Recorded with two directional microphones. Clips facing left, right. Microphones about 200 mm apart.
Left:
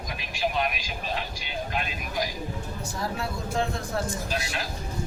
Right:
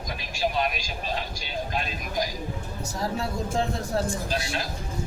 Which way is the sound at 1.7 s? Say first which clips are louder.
Right 1 dB; 35° right (ahead or behind).